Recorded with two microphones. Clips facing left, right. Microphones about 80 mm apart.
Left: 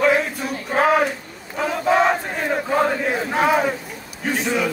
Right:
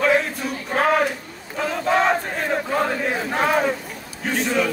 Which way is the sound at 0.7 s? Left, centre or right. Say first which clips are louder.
Left 2 dB; centre.